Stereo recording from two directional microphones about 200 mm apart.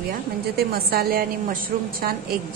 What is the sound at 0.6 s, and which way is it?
A woman's voice, 50° right (ahead or behind).